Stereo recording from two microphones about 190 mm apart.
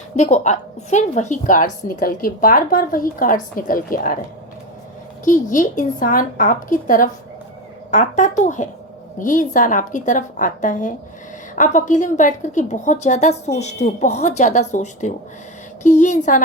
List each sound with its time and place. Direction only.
0.2 s a woman's voice: 35° left (ahead or behind)
5.2 s a woman's voice: 45° left (ahead or behind)